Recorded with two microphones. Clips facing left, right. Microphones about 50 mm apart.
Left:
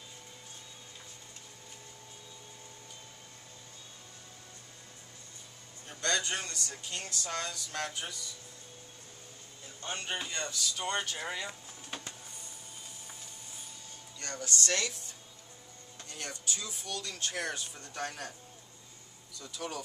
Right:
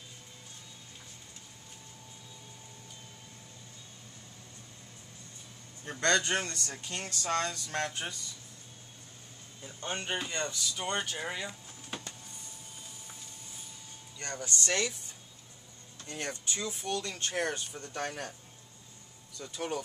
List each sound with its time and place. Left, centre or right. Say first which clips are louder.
5.9 s speech: right 5 dB; right
9.8 s speech: right 2 dB; centre
10.8 s speech: right 1 dB; centre
14.2 s speech: even; right
16.1 s speech: right 3 dB; right
19.4 s speech: right 4 dB; right